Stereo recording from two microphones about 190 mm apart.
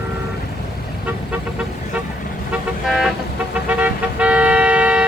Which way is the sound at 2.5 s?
Centre (ahead or behind).